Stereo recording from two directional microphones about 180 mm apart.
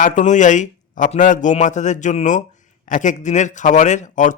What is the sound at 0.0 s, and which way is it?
A man's voice, 45° left (ahead or behind).